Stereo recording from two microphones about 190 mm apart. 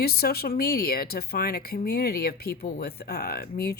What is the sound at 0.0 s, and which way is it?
Speech, 55° left (ahead or behind).